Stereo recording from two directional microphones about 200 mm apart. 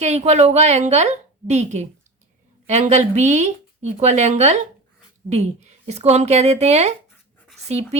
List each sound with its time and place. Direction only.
0.0 s a woman's voice: 35° right (ahead or behind)